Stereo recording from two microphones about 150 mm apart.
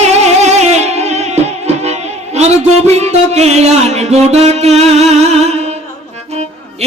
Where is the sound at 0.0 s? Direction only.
50° right (ahead or behind).